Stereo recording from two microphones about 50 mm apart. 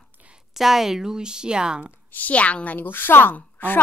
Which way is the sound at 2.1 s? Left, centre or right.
Left.